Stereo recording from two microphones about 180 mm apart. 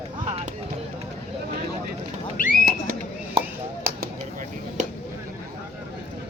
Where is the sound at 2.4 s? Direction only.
50° left (ahead or behind).